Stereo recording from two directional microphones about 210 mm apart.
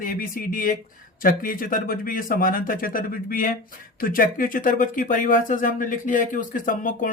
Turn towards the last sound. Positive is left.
turn(degrees=40)  # may be behind; listen again after turning